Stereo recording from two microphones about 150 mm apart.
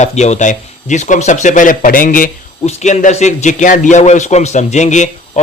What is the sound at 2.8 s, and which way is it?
Speech, 50° left (ahead or behind).